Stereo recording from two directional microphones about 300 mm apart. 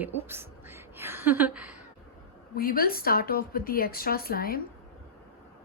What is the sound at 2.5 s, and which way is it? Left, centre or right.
Speech, left.